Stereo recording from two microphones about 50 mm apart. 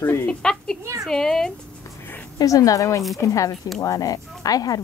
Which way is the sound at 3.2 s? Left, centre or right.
Left.